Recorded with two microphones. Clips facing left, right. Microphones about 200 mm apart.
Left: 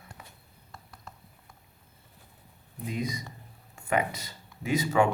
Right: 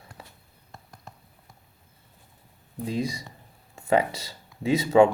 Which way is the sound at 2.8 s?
30° right (ahead or behind).